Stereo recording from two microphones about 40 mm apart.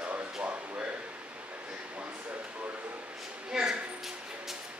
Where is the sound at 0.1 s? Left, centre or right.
Right.